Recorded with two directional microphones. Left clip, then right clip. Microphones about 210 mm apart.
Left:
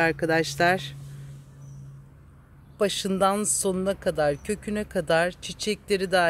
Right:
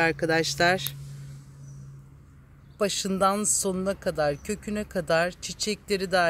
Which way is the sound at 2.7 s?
10° left (ahead or behind).